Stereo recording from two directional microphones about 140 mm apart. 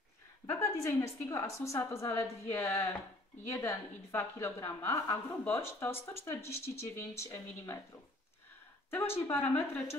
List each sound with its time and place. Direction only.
0.5 s a woman's voice: 20° left (ahead or behind)
8.9 s a woman's voice: 15° left (ahead or behind)